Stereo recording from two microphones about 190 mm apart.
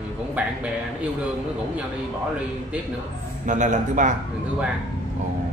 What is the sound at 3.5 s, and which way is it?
Speech, 40° right (ahead or behind).